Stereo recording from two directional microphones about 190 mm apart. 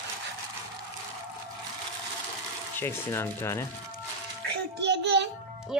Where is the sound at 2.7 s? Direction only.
15° left (ahead or behind).